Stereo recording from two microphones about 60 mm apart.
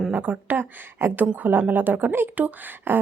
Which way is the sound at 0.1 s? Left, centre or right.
Right.